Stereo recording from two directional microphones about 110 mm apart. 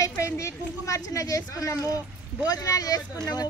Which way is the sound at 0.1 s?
25° left (ahead or behind).